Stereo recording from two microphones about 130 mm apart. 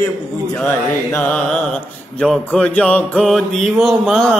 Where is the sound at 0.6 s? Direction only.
15° left (ahead or behind).